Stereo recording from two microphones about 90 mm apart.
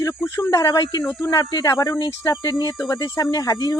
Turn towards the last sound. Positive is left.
turn(degrees=45)  # may be behind; listen again after turning